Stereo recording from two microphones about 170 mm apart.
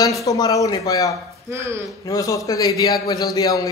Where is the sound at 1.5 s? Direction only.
15° right (ahead or behind).